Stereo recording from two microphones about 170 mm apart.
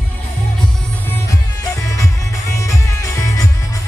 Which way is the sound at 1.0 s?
15° left (ahead or behind).